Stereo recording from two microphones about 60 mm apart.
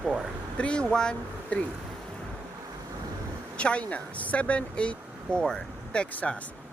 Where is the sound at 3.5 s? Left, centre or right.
Centre.